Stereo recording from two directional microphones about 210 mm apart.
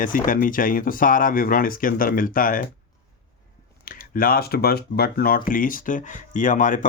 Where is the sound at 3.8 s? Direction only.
40° left (ahead or behind).